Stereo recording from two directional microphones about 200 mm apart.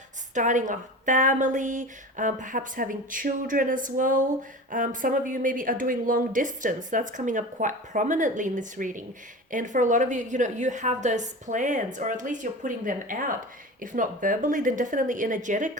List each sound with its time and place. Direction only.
0.3 s a woman's voice: 40° right (ahead or behind)